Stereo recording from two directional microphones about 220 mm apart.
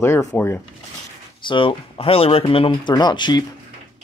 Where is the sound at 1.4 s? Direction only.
25° left (ahead or behind).